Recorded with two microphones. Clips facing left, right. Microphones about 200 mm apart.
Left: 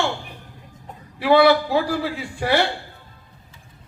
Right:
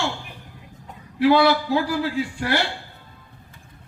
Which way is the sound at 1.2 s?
55° left (ahead or behind).